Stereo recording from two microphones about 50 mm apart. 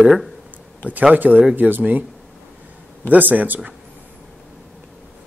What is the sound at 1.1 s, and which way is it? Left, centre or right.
Speech, right.